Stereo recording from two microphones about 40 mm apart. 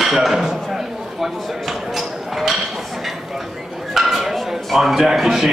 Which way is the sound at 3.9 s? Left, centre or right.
Centre.